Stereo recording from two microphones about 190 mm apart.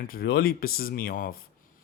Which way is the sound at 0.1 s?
55° left (ahead or behind).